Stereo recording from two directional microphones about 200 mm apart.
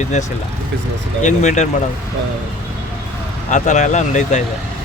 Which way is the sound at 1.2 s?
35° left (ahead or behind).